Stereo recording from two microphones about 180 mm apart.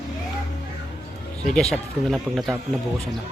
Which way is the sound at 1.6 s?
Centre (ahead or behind).